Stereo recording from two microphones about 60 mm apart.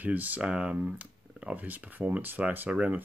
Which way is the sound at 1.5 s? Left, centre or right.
Right.